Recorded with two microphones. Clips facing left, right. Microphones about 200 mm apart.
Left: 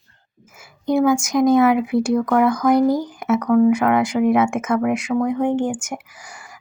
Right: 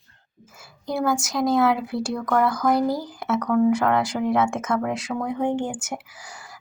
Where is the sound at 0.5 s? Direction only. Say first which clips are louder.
Left 8 dB; 20° left (ahead or behind).